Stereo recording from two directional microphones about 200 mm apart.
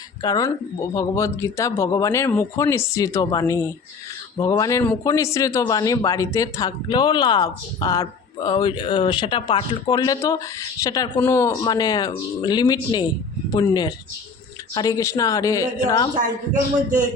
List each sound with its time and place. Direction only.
0.2 s speech: 20° left (ahead or behind)